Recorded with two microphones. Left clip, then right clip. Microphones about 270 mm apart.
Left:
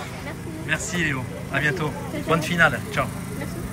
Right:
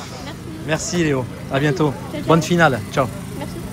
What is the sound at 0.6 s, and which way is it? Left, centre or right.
Speech, centre.